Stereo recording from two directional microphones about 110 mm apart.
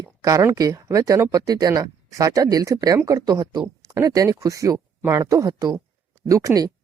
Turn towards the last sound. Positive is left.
turn(degrees=-35)  # may be behind; listen again after turning